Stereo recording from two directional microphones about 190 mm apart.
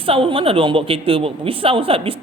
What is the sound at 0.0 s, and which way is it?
A woman's voice, 30° right (ahead or behind).